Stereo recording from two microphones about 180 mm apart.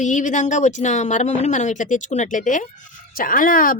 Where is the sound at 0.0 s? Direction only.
45° left (ahead or behind).